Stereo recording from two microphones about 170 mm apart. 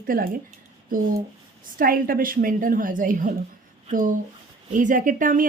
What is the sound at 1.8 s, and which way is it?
A woman's voice, 55° right (ahead or behind).